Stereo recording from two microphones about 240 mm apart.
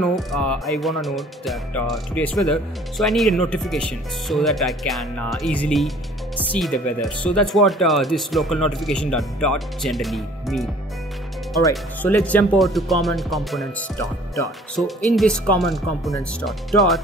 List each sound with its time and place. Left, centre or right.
0.0 s speech: centre
11.7 s speech: centre